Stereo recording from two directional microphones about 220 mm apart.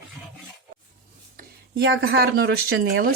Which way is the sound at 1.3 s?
50° right (ahead or behind).